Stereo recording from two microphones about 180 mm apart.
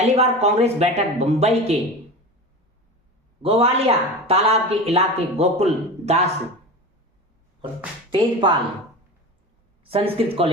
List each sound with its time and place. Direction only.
0.0 s speech: 35° right (ahead or behind)
3.4 s speech: 35° right (ahead or behind)
8.1 s a woman's voice: 25° right (ahead or behind)
9.9 s speech: 30° right (ahead or behind)